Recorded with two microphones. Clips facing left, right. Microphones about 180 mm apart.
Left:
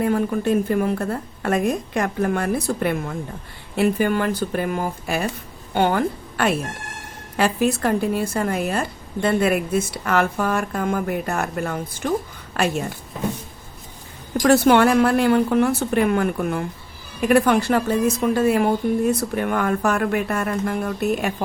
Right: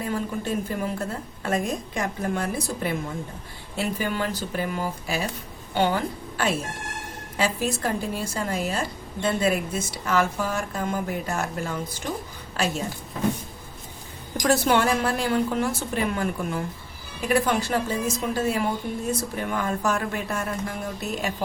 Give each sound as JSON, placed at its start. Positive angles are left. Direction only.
{"t": 0.0, "sound": "a woman's voice", "side_deg": 60}
{"t": 14.4, "sound": "speech", "side_deg": 60}